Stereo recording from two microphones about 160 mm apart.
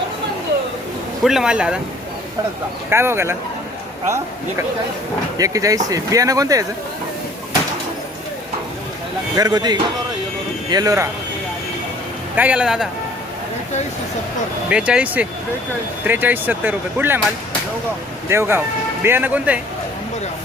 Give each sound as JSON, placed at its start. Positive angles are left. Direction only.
{"t": 1.2, "sound": "speech", "side_deg": 0}
{"t": 2.9, "sound": "speech", "side_deg": -15}
{"t": 9.3, "sound": "speech", "side_deg": -25}
{"t": 12.4, "sound": "speech", "side_deg": -5}
{"t": 14.7, "sound": "speech", "side_deg": -5}
{"t": 18.3, "sound": "speech", "side_deg": -15}